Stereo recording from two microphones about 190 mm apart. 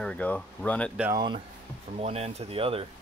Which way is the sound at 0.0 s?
5° left (ahead or behind).